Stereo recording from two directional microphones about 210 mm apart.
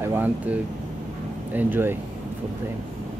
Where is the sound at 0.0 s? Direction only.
10° right (ahead or behind).